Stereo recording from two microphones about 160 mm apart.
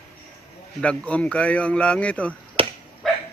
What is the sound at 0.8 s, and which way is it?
Speech, 5° left (ahead or behind).